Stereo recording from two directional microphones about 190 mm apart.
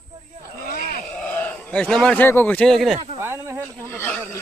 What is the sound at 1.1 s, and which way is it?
Speech, 10° left (ahead or behind).